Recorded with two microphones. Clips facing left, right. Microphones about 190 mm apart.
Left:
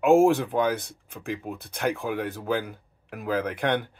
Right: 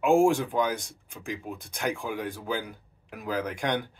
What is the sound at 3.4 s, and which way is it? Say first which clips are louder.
Speech: left 3 dB; 55° left (ahead or behind).